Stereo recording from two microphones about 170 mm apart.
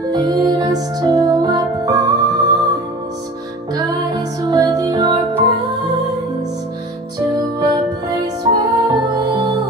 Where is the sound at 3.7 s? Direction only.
25° right (ahead or behind).